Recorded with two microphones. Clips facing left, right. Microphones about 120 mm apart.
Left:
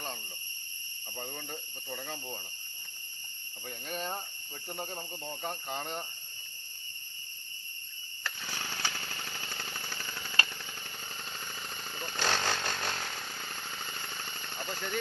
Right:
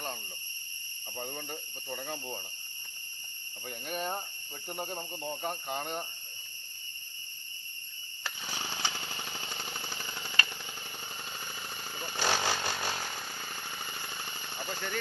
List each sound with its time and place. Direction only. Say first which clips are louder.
1.1 s speech: right 2 dB; 5° right (ahead or behind)
3.7 s speech: right 2 dB; 5° right (ahead or behind)
8.2 s jackhammer: right 1 dB; 15° right (ahead or behind)
11.3 s vehicle: even; 10° right (ahead or behind)